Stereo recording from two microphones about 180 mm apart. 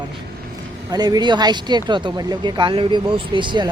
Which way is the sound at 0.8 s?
20° right (ahead or behind).